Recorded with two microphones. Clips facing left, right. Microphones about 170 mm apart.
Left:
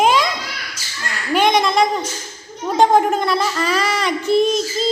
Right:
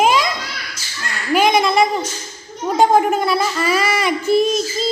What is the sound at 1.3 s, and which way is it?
Speech, 5° right (ahead or behind).